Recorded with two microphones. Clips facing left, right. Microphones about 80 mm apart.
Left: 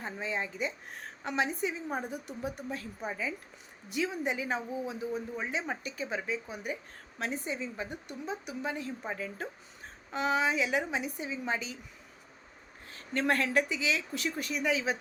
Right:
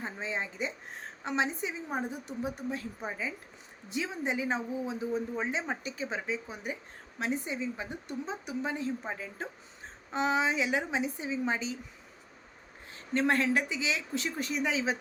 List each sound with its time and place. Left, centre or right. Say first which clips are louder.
0.0 s speech: even; right
12.9 s speech: right 2 dB; right